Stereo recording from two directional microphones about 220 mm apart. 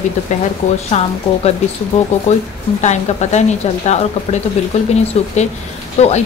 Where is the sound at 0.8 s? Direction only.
30° left (ahead or behind).